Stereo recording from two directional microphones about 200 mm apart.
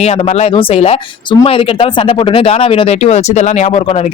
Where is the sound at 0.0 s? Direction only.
35° left (ahead or behind).